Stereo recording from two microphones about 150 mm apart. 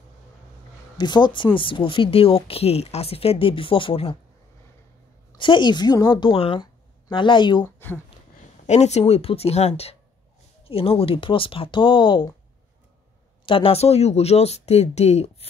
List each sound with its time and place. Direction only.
0.9 s speech: 30° left (ahead or behind)
5.4 s a woman's voice: 30° left (ahead or behind)
7.6 s speech: 15° left (ahead or behind)
8.6 s speech: 45° left (ahead or behind)
13.5 s speech: 40° left (ahead or behind)